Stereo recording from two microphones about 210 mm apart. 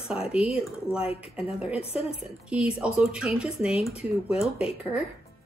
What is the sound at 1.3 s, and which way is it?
Speech, 5° right (ahead or behind).